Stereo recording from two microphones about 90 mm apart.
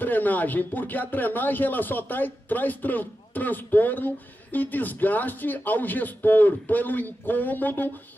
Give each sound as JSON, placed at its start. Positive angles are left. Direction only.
{"t": 0.0, "sound": "speech", "side_deg": 20}